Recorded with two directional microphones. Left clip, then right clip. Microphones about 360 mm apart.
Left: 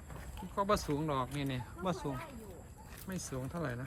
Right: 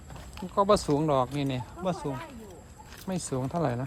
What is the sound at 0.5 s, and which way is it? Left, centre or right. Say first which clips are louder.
Speech: right 10 dB; centre.